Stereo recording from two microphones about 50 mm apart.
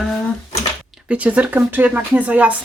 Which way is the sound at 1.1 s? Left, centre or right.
Right.